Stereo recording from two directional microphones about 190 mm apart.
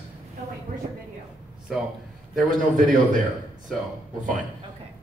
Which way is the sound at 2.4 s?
45° right (ahead or behind).